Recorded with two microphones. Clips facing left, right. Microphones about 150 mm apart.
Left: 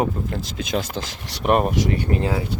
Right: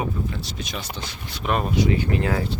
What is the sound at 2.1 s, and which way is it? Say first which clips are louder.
Speech: left 1 dB; 40° left (ahead or behind).